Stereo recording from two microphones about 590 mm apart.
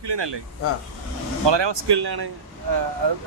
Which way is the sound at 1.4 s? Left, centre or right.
Right.